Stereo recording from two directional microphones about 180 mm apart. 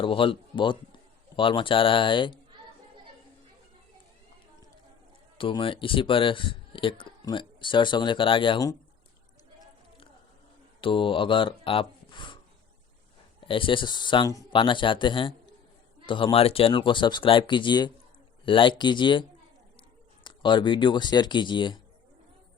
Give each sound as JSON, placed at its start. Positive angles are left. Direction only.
{"t": 0.0, "sound": "a man's voice", "side_deg": 30}
{"t": 5.4, "sound": "a man's voice", "side_deg": 30}
{"t": 10.8, "sound": "speech", "side_deg": 30}
{"t": 13.4, "sound": "a man's voice", "side_deg": 30}
{"t": 20.2, "sound": "a man's voice", "side_deg": 25}